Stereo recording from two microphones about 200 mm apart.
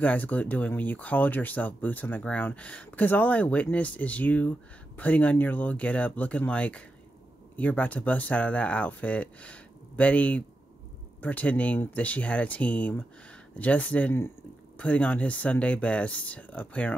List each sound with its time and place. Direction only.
0.0 s speech: 10° left (ahead or behind)